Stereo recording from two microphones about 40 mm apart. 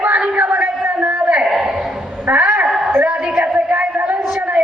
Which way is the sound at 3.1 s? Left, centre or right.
Right.